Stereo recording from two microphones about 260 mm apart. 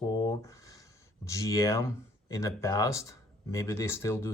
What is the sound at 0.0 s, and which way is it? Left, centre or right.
Speech, centre.